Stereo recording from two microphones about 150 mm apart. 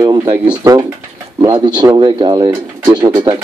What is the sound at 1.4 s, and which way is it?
Speech, 30° right (ahead or behind).